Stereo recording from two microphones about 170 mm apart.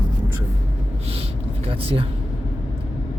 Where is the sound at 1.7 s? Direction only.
30° right (ahead or behind).